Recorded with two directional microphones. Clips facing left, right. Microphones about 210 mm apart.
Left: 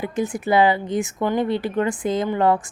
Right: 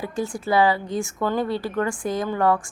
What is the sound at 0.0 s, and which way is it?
Speech, 20° left (ahead or behind).